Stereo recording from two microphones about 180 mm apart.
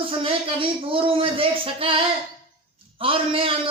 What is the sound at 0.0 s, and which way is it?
A man's voice, 30° right (ahead or behind).